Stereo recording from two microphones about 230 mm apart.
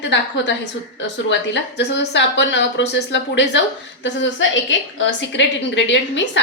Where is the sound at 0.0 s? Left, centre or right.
Left.